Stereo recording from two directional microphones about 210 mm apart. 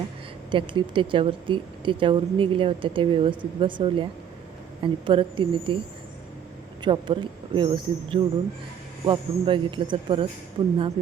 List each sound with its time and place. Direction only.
0.5 s speech: 25° right (ahead or behind)
6.8 s speech: 20° right (ahead or behind)